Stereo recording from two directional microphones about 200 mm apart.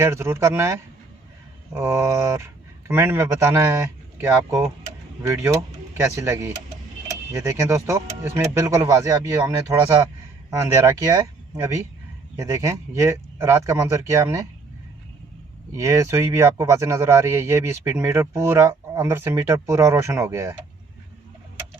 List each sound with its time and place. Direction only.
0.0 s speech: 15° right (ahead or behind)
15.7 s speech: 15° right (ahead or behind)